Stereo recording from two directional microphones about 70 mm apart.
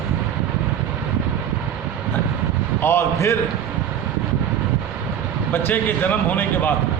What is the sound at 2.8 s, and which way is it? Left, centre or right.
Speech, left.